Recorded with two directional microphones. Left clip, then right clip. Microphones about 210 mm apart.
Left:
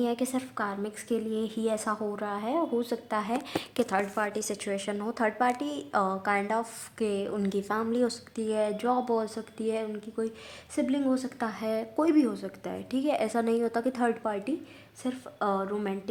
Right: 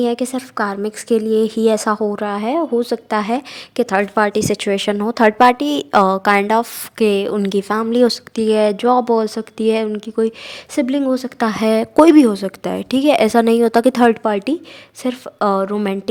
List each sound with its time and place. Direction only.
0.0 s a woman's voice: 35° right (ahead or behind)